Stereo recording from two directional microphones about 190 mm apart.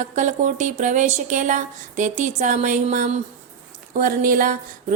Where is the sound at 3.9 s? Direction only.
45° right (ahead or behind).